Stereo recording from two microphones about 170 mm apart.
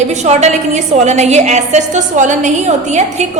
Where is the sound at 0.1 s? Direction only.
40° right (ahead or behind).